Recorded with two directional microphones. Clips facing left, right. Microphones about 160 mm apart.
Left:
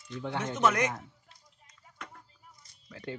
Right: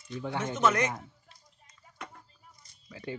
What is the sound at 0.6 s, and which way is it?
Speech, 15° left (ahead or behind).